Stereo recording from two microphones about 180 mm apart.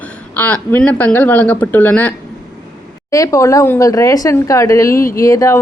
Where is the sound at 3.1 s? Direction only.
20° left (ahead or behind).